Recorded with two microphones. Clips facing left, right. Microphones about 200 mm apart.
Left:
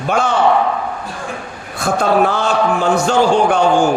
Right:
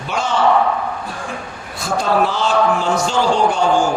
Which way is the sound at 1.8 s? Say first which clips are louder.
Left 3 dB; 55° left (ahead or behind).